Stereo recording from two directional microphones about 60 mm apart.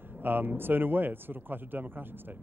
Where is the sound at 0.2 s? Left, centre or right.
Right.